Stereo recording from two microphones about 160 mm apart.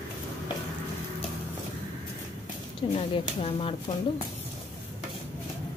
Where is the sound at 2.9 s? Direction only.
40° left (ahead or behind).